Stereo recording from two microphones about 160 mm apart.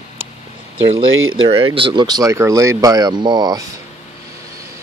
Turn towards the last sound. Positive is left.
turn(degrees=-25)  # may be behind; listen again after turning